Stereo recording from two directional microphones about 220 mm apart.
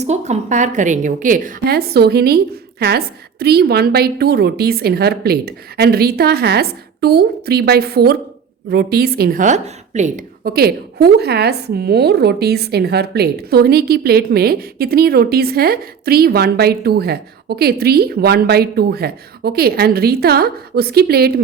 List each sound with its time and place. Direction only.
0.0 s a woman's voice: 30° right (ahead or behind)